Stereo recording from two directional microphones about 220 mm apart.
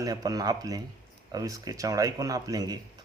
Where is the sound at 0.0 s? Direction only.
15° right (ahead or behind).